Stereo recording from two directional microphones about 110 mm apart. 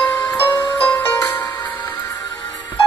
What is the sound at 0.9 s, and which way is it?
Music, 20° left (ahead or behind).